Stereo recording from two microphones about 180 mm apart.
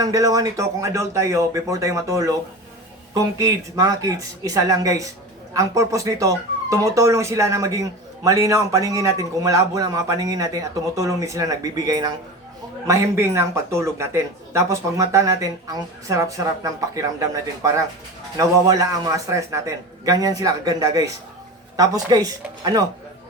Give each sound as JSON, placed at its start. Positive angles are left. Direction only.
{"t": 0.0, "sound": "a man's voice", "side_deg": -20}